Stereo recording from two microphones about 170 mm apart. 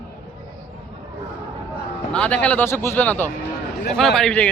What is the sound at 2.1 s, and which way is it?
Speech, 5° left (ahead or behind).